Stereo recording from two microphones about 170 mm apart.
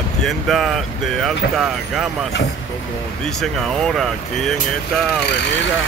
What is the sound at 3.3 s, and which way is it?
Speech, centre (ahead or behind).